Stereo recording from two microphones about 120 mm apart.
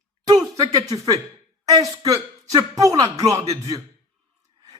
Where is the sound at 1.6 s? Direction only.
30° right (ahead or behind).